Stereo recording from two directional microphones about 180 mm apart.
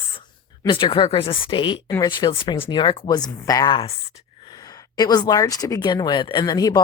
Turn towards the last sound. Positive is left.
turn(degrees=20)  # may be behind; listen again after turning